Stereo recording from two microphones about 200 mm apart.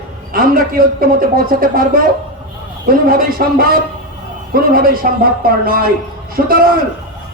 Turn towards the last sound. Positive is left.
turn(degrees=-45)  # may be behind; listen again after turning